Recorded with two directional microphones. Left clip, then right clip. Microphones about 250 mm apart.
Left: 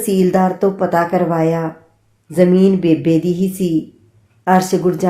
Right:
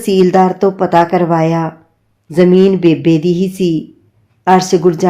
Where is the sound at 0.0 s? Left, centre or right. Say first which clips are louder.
Right 5 dB; right.